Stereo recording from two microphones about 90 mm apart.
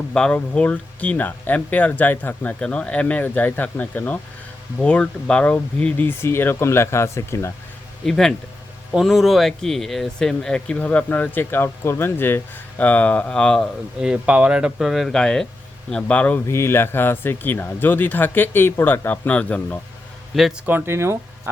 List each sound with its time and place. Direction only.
0.1 s speech: 10° left (ahead or behind); by 7.5 s 30° left (ahead or behind)
8.0 s speech: 5° left (ahead or behind)
14.0 s speech: 10° right (ahead or behind); by 16.4 s 15° left (ahead or behind)
16.5 s speech: 30° left (ahead or behind)
20.3 s speech: centre (ahead or behind)
20.7 s speech: 25° right (ahead or behind)